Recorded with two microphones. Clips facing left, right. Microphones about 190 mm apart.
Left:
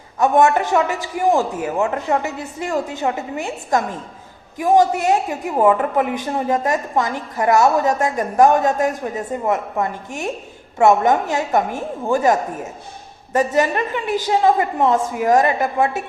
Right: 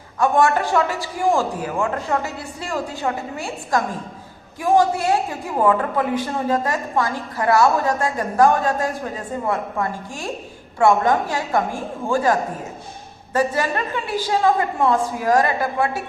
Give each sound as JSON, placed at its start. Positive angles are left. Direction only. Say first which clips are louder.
{"t": 0.2, "sound": "a woman's voice", "louder": "left 3 dB", "side_deg": 20}